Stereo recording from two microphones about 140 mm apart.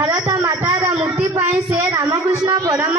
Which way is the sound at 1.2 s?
20° right (ahead or behind).